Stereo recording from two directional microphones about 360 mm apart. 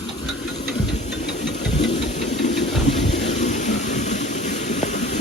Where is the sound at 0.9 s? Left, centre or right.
Centre.